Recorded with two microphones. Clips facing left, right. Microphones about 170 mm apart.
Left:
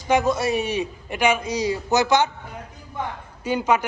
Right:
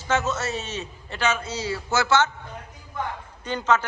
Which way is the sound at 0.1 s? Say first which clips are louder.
Left 5 dB; 15° left (ahead or behind).